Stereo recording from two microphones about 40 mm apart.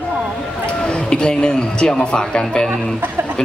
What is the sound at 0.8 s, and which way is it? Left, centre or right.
A man's voice, left.